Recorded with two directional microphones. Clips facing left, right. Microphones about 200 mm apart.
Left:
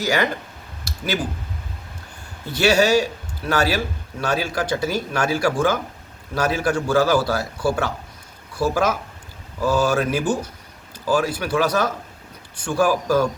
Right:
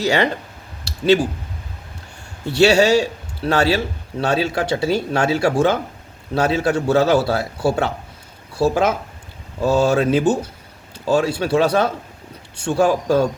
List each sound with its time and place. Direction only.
0.0 s a man's voice: 30° right (ahead or behind)
2.6 s a man's voice: 25° right (ahead or behind)